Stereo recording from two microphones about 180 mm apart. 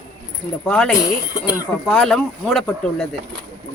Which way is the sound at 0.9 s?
20° left (ahead or behind).